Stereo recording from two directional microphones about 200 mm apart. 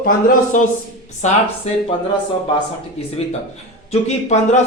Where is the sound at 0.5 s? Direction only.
40° left (ahead or behind).